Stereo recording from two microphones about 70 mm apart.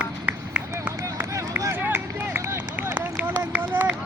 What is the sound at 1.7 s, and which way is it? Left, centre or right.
Run, right.